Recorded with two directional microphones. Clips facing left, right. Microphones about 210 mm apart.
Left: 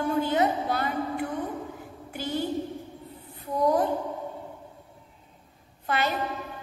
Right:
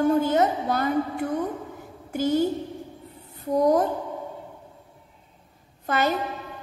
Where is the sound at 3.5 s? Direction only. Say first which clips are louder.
Right 4 dB; 45° right (ahead or behind).